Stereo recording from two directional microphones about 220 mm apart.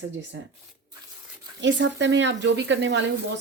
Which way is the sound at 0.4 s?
55° right (ahead or behind).